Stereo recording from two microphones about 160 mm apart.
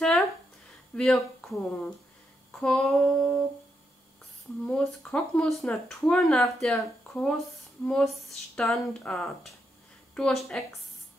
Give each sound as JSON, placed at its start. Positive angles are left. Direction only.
{"t": 0.9, "sound": "speech", "side_deg": 5}
{"t": 4.6, "sound": "speech", "side_deg": 5}